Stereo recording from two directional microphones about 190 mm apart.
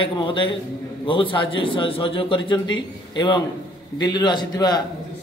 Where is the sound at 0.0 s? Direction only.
25° left (ahead or behind).